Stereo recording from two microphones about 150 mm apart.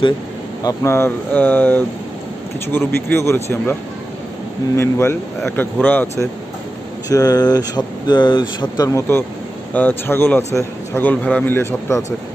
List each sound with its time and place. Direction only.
0.7 s a man's voice: 15° left (ahead or behind)
3.1 s a man's voice: 15° left (ahead or behind)
4.7 s a man's voice: 15° left (ahead or behind)
7.1 s a man's voice: 25° left (ahead or behind)